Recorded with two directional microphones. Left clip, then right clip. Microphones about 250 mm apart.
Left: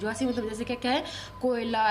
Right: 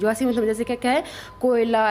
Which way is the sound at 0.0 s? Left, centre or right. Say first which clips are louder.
Right 9 dB; right.